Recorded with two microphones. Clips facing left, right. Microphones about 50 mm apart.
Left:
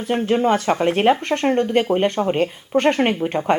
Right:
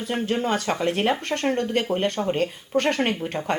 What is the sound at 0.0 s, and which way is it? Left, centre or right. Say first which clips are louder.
Speech: left 6 dB; left.